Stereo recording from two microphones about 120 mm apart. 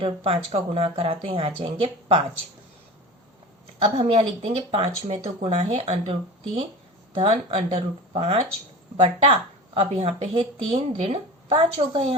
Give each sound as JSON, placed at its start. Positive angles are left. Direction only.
{"t": 0.0, "sound": "speech", "side_deg": -50}
{"t": 3.8, "sound": "speech", "side_deg": -55}